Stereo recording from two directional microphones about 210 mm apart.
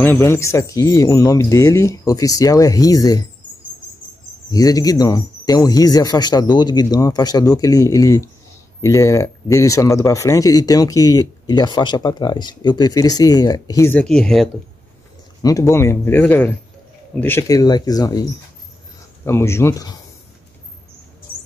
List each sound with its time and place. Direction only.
0.0 s speech: 10° left (ahead or behind)
4.5 s speech: 15° left (ahead or behind)
15.4 s speech: 15° left (ahead or behind)
19.2 s speech: 10° left (ahead or behind)